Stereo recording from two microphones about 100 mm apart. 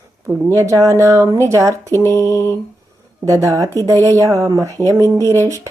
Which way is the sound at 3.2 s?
30° right (ahead or behind).